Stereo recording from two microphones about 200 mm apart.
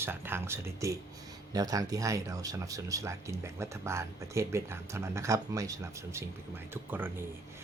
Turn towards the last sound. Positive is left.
turn(degrees=-10)  # may be behind; listen again after turning